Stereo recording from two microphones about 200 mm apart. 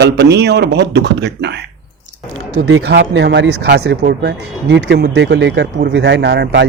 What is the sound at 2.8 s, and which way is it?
Speech, 60° right (ahead or behind).